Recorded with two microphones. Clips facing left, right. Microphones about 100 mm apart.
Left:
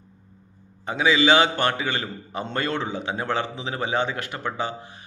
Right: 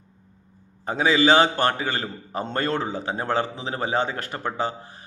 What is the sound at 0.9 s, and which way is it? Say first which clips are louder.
A man's voice: right 1 dB; 40° right (ahead or behind).